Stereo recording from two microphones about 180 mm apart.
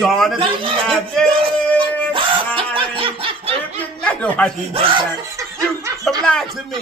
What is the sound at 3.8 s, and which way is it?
Speech, 5° left (ahead or behind).